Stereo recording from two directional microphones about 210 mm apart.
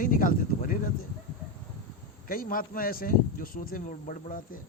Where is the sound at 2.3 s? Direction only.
40° left (ahead or behind).